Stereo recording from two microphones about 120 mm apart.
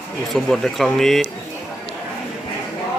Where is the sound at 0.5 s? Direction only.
Centre (ahead or behind).